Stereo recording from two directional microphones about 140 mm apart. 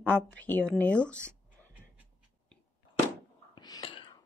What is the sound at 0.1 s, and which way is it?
Speech, 10° left (ahead or behind).